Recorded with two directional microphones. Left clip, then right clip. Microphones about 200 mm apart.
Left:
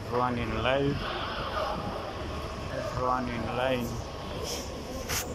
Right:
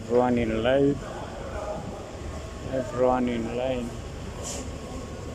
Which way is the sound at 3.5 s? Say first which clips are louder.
Left 2 dB; 20° right (ahead or behind).